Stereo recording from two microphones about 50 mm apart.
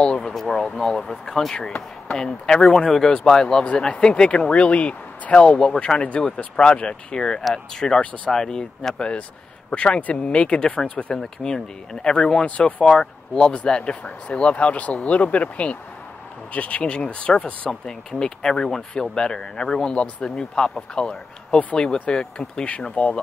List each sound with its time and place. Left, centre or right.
0.0 s a sound: centre
0.7 s speech: centre; by 12.8 s left
12.8 s speech: centre
17.6 s speech: centre